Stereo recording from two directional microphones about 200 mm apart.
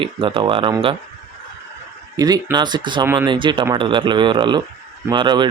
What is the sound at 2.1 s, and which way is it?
Speech, 20° right (ahead or behind).